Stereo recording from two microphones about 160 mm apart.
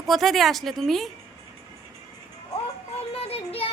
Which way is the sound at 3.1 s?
40° left (ahead or behind).